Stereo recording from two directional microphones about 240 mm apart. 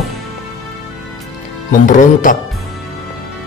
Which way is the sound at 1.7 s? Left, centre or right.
Left.